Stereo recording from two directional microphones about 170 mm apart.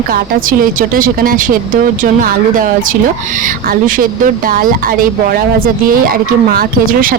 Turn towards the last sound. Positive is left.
turn(degrees=-55)  # may be behind; listen again after turning